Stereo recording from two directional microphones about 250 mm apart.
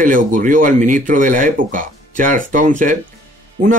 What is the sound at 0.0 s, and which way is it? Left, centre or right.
A man's voice, right.